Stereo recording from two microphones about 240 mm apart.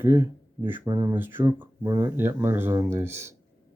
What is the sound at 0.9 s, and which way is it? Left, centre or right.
Speech, centre.